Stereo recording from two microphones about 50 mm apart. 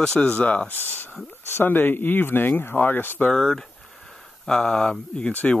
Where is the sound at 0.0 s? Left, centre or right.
Centre.